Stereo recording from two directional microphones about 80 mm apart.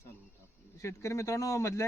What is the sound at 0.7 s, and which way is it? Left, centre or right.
Speech, left.